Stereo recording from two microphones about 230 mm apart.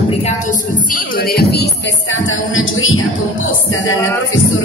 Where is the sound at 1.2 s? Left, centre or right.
Left.